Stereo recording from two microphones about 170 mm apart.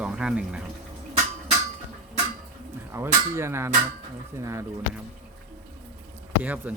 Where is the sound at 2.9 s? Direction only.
15° right (ahead or behind).